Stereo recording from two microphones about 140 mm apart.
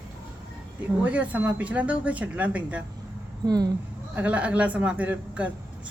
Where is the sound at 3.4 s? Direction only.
25° right (ahead or behind).